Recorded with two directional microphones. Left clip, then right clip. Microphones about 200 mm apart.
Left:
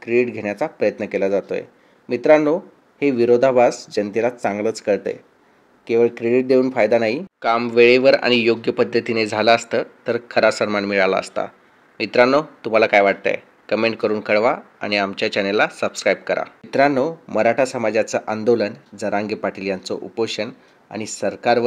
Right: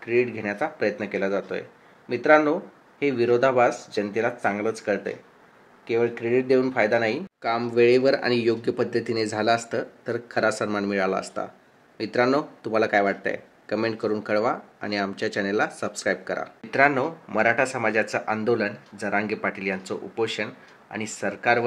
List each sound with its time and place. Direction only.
0.0 s speech: 50° left (ahead or behind)
7.3 s speech: 10° left (ahead or behind)
16.7 s speech: 55° left (ahead or behind)